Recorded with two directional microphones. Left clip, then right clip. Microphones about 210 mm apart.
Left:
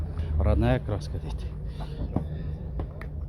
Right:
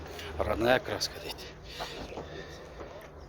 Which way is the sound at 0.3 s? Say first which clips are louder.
Right 2 dB; 20° right (ahead or behind).